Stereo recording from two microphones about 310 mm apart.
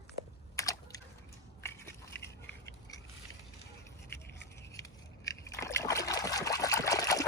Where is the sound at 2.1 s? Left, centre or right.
Left.